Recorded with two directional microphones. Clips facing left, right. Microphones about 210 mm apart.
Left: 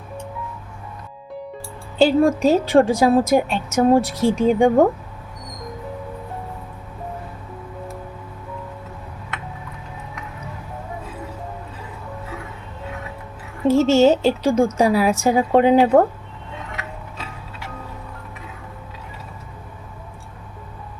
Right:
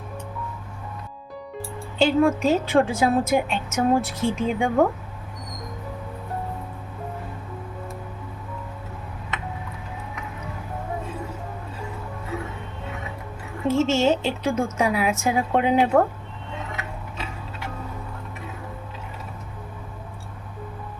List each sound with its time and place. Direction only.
2.0 s a woman's voice: 35° left (ahead or behind)
13.7 s a woman's voice: 35° left (ahead or behind)